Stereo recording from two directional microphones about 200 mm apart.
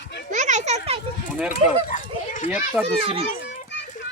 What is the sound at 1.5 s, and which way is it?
Speech, 45° left (ahead or behind).